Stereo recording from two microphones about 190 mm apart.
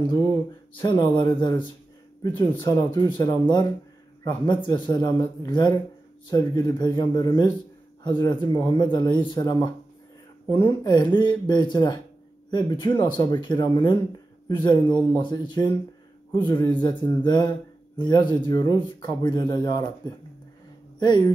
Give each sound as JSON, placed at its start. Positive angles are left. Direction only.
{"t": 0.7, "sound": "speech", "side_deg": 25}